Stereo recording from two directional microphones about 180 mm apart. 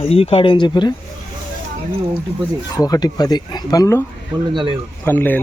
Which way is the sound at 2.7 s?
20° left (ahead or behind).